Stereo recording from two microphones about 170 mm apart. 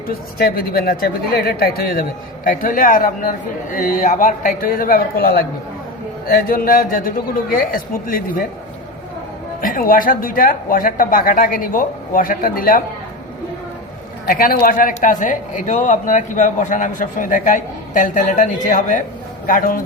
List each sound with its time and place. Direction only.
0.1 s speech: 60° left (ahead or behind)
9.6 s speech: 55° left (ahead or behind)
14.3 s speech: 60° left (ahead or behind)